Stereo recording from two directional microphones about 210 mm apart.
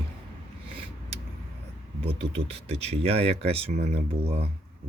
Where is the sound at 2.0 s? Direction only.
25° right (ahead or behind).